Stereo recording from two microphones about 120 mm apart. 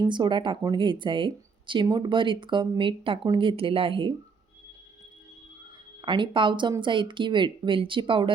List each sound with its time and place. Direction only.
0.1 s speech: 40° right (ahead or behind)
6.0 s speech: 40° right (ahead or behind)